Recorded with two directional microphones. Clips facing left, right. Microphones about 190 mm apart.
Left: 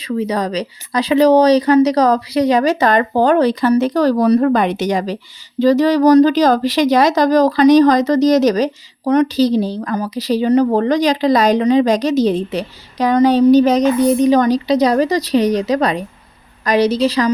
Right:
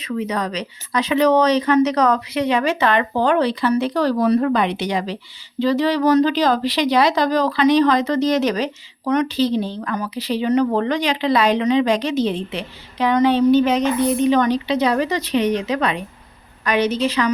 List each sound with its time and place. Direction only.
0.0 s speech: 35° left (ahead or behind)